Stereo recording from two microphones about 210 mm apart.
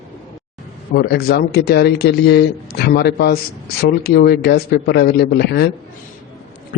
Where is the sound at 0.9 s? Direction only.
50° left (ahead or behind).